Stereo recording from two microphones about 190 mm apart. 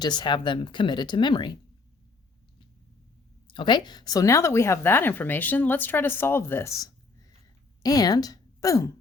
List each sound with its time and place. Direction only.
0.0 s speech: 25° left (ahead or behind)
3.4 s a woman's voice: 25° left (ahead or behind)